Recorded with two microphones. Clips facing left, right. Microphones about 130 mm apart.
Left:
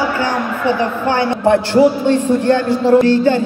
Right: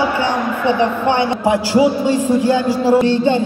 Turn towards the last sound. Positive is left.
turn(degrees=-20)  # may be behind; listen again after turning